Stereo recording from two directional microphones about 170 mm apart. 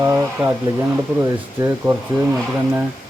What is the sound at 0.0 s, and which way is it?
Speech, 15° right (ahead or behind).